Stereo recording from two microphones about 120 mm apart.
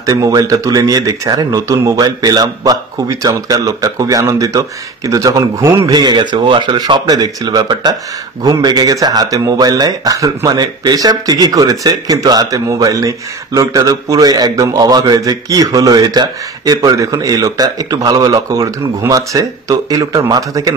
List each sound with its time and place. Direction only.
0.0 s speech: 30° right (ahead or behind)